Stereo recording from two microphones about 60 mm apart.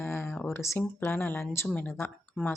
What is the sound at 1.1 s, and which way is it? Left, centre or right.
Speech, left.